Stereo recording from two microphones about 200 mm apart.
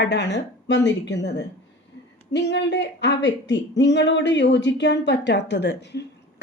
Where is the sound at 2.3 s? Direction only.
60° left (ahead or behind).